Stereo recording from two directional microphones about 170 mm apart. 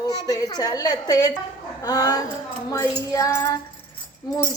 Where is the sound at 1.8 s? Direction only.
20° left (ahead or behind).